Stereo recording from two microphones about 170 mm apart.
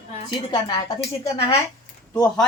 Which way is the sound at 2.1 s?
10° left (ahead or behind).